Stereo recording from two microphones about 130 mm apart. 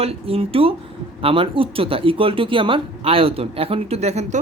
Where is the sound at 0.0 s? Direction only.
50° right (ahead or behind).